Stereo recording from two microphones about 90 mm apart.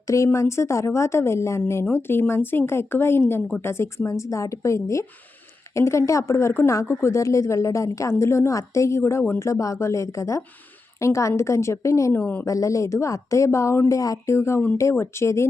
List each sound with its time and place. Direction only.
0.3 s a woman's voice: 30° left (ahead or behind)
9.5 s a woman's voice: 35° left (ahead or behind)
12.2 s a woman's voice: 20° left (ahead or behind)
12.5 s a woman's voice: 35° left (ahead or behind)